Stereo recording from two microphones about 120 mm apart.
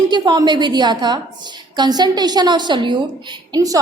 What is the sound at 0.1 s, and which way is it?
A woman's voice, 40° right (ahead or behind).